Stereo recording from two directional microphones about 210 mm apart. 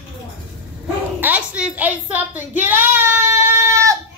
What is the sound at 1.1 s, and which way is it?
Child singing, 10° right (ahead or behind).